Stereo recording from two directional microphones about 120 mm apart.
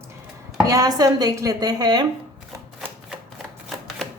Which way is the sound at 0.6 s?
30° right (ahead or behind).